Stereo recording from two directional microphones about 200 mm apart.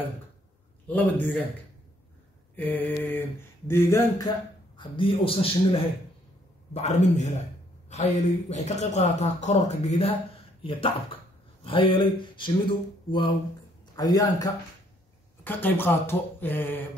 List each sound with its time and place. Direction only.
0.8 s mantra: 10° left (ahead or behind)
2.5 s mantra: 10° left (ahead or behind)
4.7 s a man's voice: 25° left (ahead or behind)
13.9 s mantra: 20° left (ahead or behind)